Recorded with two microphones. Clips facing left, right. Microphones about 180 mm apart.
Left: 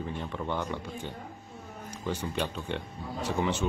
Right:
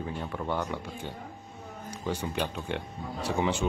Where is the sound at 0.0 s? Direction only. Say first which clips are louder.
Right 1 dB; 5° right (ahead or behind).